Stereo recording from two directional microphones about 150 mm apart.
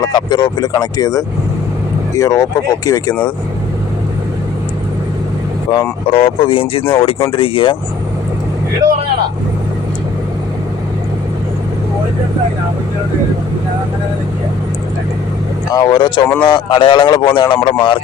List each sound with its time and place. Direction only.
0.1 s speech: 30° left (ahead or behind)
5.7 s speech: 30° left (ahead or behind)
15.7 s speech: 25° left (ahead or behind)